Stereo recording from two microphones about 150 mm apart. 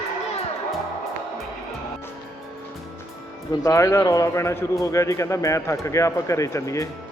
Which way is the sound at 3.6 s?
20° left (ahead or behind).